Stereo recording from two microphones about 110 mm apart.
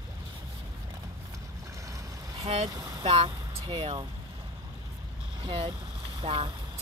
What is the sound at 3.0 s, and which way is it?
Speech, 60° right (ahead or behind).